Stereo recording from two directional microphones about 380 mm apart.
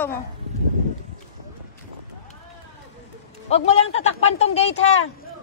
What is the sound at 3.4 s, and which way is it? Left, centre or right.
Speech, centre.